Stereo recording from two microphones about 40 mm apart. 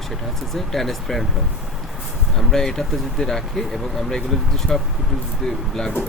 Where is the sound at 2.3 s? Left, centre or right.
Centre.